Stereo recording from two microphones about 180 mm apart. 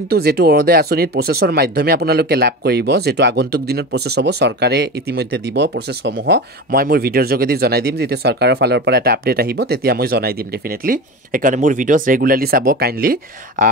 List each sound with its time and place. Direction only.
0.1 s speech: 60° right (ahead or behind)
10.9 s speech: 50° right (ahead or behind)